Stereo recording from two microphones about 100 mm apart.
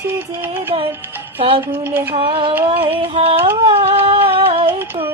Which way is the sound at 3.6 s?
80° right.